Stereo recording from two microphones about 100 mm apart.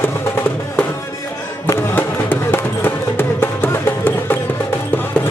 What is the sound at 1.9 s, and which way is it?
Music, 20° left (ahead or behind).